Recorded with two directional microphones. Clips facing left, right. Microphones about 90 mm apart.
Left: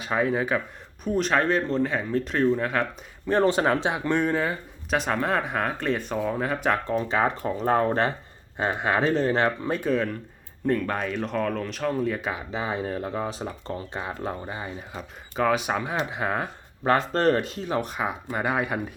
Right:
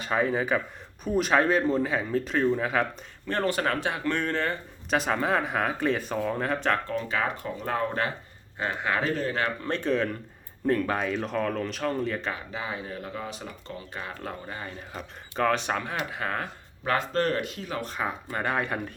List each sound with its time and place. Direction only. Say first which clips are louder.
0.0 s speech: left 1 dB; centre (ahead or behind)
3.2 s speech: left 6 dB; 20° left (ahead or behind)
4.9 s speech: left 1 dB; centre (ahead or behind)
6.8 s speech: left 5 dB; 25° left (ahead or behind)
9.6 s speech: left 2 dB; 5° left (ahead or behind)
12.3 s speech: left 4 dB; 20° left (ahead or behind); by 14.0 s 35° left (ahead or behind)
14.0 s speech: left 5 dB; 20° left (ahead or behind)
16.8 s speech: left 5 dB; 30° left (ahead or behind); by 18.8 s 10° left (ahead or behind)